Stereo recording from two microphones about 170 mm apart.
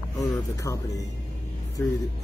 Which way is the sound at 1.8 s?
10° left (ahead or behind).